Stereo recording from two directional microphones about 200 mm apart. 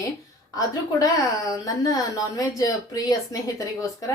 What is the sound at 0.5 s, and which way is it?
A woman's voice, 15° left (ahead or behind).